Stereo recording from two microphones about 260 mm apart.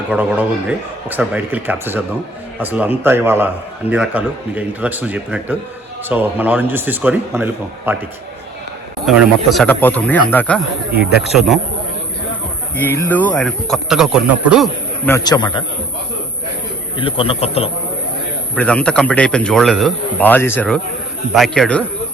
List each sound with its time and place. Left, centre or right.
0.1 s a man's voice: centre
9.0 s speech: centre
12.7 s a man's voice: centre
17.0 s a man's voice: left
18.5 s speech: centre